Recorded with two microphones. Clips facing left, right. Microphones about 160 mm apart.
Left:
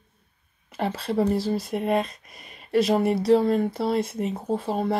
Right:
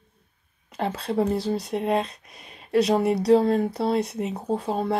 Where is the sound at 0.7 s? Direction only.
Centre (ahead or behind).